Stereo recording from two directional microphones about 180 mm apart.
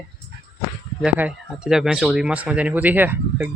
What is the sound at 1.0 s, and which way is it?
Speech, 5° right (ahead or behind).